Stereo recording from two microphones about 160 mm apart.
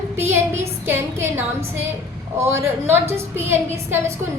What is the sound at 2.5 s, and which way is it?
A woman's voice, 15° right (ahead or behind).